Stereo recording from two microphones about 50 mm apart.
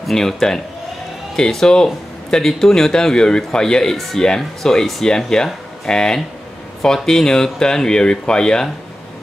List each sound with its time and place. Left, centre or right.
0.0 s speech: centre